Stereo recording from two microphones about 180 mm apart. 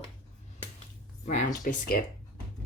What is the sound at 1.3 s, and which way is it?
Speech, 45° left (ahead or behind).